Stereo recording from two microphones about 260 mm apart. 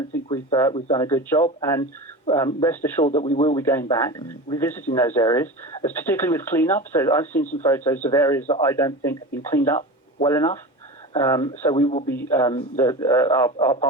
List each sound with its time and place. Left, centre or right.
0.1 s speech: centre
3.1 s speech: left
3.5 s speech: centre